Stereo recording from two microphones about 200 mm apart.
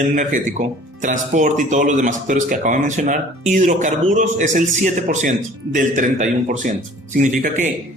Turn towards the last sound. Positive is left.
turn(degrees=-40)  # may be behind; listen again after turning